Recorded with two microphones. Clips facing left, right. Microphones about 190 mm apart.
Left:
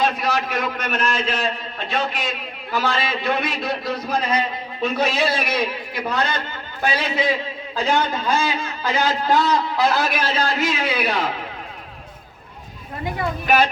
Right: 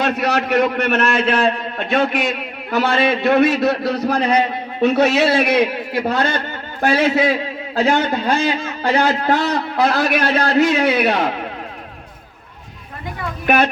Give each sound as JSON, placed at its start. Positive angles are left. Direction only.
{"t": 0.0, "sound": "a man's voice", "side_deg": -65}